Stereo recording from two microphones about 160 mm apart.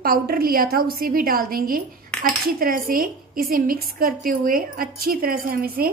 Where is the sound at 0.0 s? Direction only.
65° right (ahead or behind).